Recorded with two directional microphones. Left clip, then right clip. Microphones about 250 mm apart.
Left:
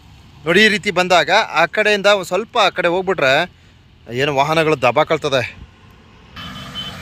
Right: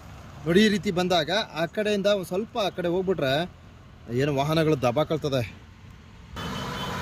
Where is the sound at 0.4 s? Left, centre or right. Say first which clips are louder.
Left 10 dB; centre.